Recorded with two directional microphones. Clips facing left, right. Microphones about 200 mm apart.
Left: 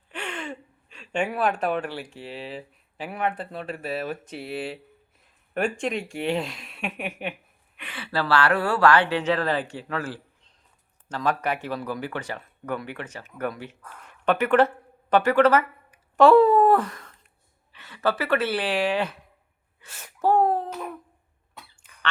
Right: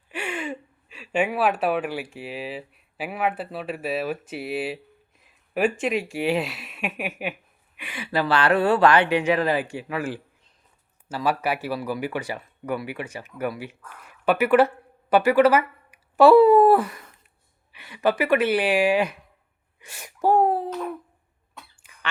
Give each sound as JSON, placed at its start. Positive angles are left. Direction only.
{"t": 0.1, "sound": "a woman's voice", "side_deg": -10}
{"t": 19.8, "sound": "gasp", "side_deg": -15}